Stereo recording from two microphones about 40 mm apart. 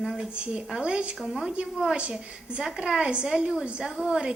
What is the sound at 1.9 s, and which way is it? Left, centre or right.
A woman's voice, right.